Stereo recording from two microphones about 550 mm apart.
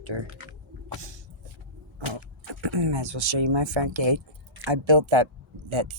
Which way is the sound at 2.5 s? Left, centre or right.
Right.